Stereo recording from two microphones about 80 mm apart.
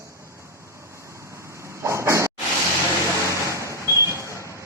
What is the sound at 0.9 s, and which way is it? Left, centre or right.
Vehicle, right.